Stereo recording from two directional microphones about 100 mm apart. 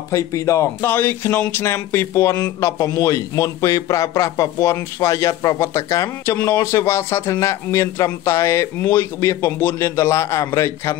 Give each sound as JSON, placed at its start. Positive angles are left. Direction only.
{"t": 0.1, "sound": "a man's voice", "side_deg": 30}